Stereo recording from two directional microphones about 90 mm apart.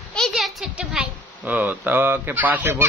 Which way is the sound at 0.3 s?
5° right (ahead or behind).